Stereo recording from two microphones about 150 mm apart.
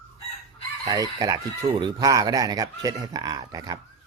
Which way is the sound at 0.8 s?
25° right (ahead or behind).